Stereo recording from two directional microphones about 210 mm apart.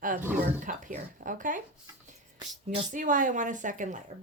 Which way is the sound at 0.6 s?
40° right (ahead or behind).